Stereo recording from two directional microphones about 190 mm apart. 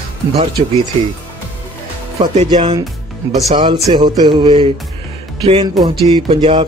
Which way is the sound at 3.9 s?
25° right (ahead or behind).